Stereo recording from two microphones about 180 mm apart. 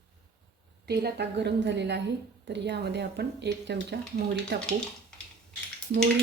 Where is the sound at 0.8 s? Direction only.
65° right (ahead or behind).